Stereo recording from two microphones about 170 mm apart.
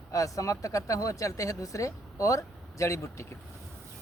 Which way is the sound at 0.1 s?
20° left (ahead or behind).